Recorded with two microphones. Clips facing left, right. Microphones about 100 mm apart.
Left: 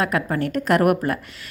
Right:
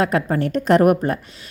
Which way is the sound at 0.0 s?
30° right (ahead or behind).